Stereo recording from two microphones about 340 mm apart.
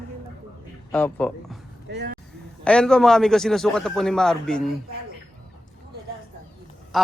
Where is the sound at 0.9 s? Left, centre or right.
Centre.